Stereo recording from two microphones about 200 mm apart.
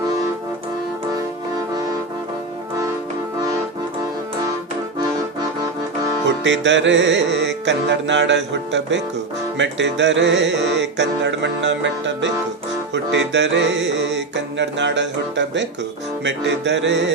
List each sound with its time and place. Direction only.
6.2 s music: 65° right (ahead or behind)